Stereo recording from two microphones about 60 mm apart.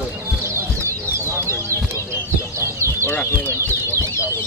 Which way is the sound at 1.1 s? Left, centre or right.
Right.